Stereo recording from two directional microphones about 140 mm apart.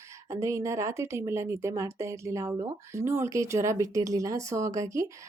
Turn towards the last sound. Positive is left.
turn(degrees=-20)  # may be behind; listen again after turning